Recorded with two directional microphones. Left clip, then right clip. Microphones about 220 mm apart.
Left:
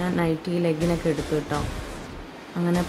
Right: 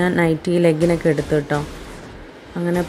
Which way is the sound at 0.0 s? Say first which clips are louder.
Right 7 dB; 30° right (ahead or behind).